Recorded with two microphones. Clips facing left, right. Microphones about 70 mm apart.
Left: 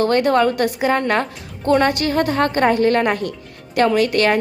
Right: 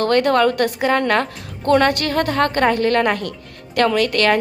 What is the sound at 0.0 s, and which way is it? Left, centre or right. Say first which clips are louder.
A woman's voice: even; centre.